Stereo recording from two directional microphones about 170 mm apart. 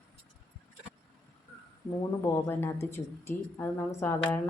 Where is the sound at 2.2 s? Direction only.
15° left (ahead or behind).